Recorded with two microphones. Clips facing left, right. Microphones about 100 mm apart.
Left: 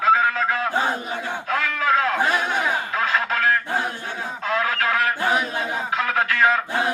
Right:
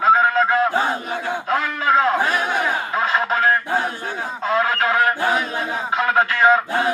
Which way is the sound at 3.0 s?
25° right (ahead or behind).